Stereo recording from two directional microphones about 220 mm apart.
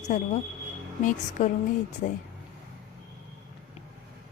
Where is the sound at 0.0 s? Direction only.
35° left (ahead or behind).